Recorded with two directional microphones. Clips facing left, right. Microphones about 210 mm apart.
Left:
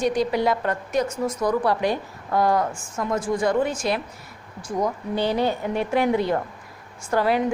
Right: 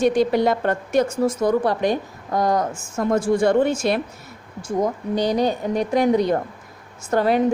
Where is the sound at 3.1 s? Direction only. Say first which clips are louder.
Right 5 dB; 30° right (ahead or behind).